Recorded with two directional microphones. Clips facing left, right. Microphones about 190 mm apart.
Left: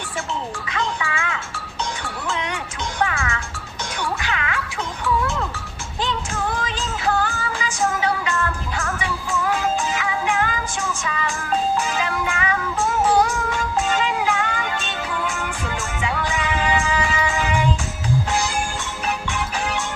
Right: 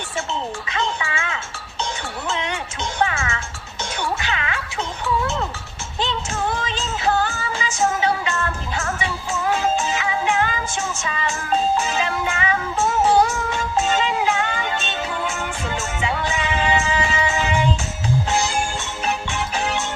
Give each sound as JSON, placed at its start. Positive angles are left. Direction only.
{"t": 0.7, "sound": "music", "side_deg": -25}